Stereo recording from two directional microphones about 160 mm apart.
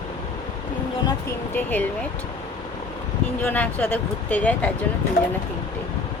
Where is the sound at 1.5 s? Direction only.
10° left (ahead or behind).